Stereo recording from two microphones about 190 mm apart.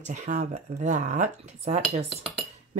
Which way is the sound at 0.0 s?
40° right (ahead or behind).